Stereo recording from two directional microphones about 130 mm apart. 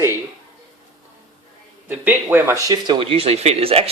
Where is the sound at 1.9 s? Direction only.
15° right (ahead or behind).